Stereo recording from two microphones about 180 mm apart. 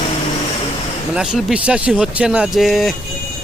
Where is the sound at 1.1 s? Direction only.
5° right (ahead or behind).